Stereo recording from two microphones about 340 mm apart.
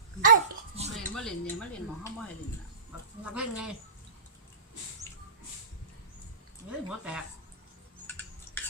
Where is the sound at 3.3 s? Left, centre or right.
Centre.